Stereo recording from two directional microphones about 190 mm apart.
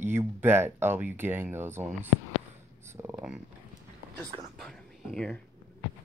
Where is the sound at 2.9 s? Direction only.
15° right (ahead or behind).